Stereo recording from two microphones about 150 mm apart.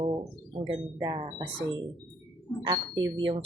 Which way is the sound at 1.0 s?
30° right (ahead or behind).